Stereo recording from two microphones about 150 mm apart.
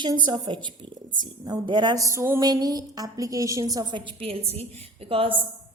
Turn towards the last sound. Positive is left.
turn(degrees=-35)  # may be behind; listen again after turning